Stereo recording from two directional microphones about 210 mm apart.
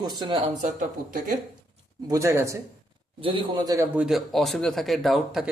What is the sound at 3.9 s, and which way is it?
Speech, 5° right (ahead or behind).